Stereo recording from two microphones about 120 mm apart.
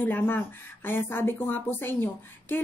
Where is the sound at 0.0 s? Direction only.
15° left (ahead or behind).